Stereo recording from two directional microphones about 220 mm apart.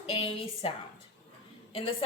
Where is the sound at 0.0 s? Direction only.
25° left (ahead or behind).